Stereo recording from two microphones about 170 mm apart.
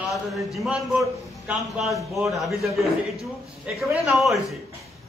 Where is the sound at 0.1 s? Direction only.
Centre (ahead or behind).